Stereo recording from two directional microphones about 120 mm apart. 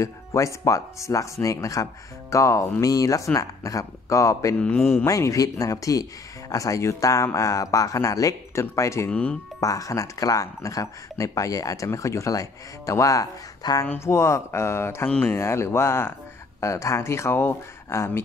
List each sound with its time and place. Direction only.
0.0 s speech: 25° left (ahead or behind)
4.6 s speech: 10° left (ahead or behind)
9.1 s speech: 10° left (ahead or behind)
9.6 s speech: 30° left (ahead or behind)
15.0 s speech: 10° left (ahead or behind)
15.3 s speech: 20° left (ahead or behind)